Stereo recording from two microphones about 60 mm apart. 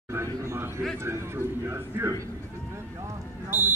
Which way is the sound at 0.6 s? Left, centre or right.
Right.